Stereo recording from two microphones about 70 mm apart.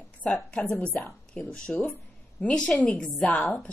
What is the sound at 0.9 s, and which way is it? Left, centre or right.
A woman's voice, centre.